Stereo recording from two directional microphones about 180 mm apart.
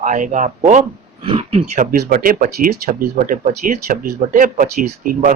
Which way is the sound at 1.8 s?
50° right (ahead or behind).